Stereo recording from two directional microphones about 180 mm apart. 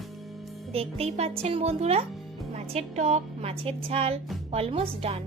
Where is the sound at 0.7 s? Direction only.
35° right (ahead or behind).